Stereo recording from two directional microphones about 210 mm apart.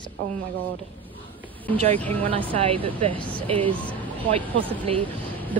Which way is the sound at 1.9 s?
5° left (ahead or behind).